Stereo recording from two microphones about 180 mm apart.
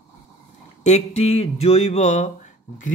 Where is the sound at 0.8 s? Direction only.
35° left (ahead or behind).